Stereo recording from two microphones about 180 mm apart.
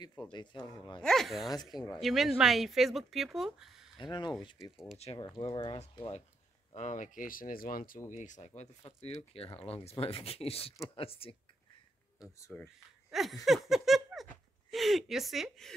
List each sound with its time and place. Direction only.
0.3 s speech: 25° left (ahead or behind)
1.0 s speech: centre (ahead or behind)
1.5 s speech: 20° left (ahead or behind)
1.9 s speech: centre (ahead or behind)
4.0 s speech: 25° left (ahead or behind)
12.4 s speech: 15° left (ahead or behind)
13.1 s speech: centre (ahead or behind)
13.5 s a sound: centre (ahead or behind)
14.7 s speech: centre (ahead or behind)